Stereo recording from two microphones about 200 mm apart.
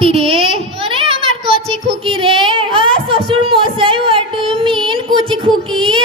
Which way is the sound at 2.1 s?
25° right (ahead or behind).